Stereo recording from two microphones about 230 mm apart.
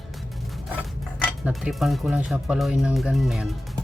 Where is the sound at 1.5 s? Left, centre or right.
Centre.